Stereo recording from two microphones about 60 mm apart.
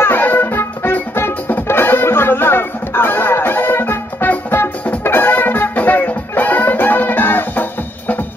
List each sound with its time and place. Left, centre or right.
0.0 s music: left